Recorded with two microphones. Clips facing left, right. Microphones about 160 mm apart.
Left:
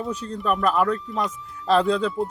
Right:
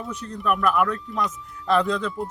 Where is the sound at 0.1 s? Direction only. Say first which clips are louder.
Right 1 dB; 30° left (ahead or behind).